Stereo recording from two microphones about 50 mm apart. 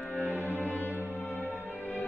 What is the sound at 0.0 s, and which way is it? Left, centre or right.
Music, left.